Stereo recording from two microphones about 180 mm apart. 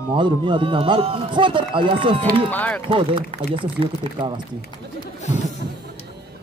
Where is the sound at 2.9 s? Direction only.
30° right (ahead or behind).